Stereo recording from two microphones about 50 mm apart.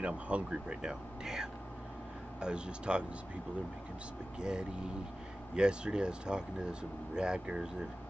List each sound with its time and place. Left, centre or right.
0.0 s speech: right
4.4 s speech: centre